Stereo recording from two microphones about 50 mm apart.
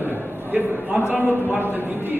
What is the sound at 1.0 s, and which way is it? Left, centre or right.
A man's voice, right.